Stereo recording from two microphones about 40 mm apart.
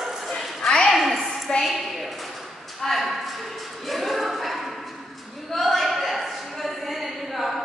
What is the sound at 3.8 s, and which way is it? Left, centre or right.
Choir, centre.